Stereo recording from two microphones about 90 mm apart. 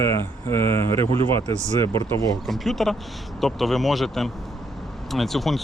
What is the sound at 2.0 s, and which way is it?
Speech, 45° left (ahead or behind).